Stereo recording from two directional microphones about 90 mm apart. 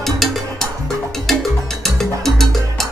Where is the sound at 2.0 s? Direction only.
5° left (ahead or behind).